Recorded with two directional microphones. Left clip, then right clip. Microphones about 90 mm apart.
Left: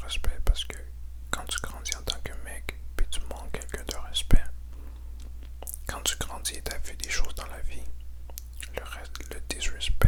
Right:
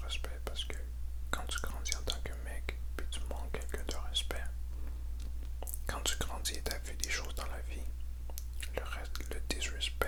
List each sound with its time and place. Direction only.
0.0 s whispering: 20° left (ahead or behind)
5.5 s whispering: 15° left (ahead or behind)